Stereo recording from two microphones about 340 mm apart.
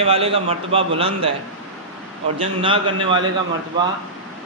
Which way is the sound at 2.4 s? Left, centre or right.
Centre.